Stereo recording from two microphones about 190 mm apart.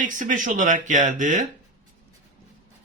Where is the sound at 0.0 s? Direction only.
45° right (ahead or behind).